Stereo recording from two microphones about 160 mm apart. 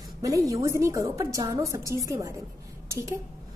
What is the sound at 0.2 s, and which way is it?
A woman's voice, 20° right (ahead or behind).